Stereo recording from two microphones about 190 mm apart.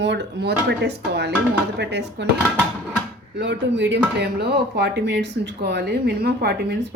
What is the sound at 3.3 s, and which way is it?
Speech, 65° right (ahead or behind).